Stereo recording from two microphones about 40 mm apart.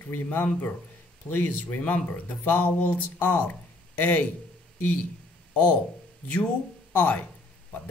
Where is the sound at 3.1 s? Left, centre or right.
Left.